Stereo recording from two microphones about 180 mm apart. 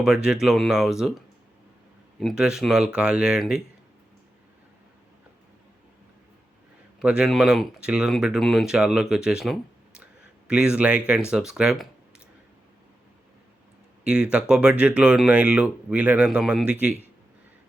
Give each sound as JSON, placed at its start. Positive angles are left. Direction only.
{"t": 0.0, "sound": "speech", "side_deg": -5}
{"t": 7.0, "sound": "speech", "side_deg": -5}
{"t": 14.0, "sound": "speech", "side_deg": -5}